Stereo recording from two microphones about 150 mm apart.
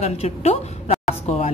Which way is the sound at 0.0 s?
45° left (ahead or behind).